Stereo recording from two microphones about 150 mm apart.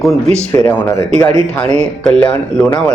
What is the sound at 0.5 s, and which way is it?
Speech, 20° left (ahead or behind).